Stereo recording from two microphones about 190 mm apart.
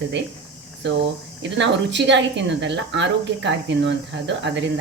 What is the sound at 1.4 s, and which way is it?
A woman's voice, 70° right (ahead or behind).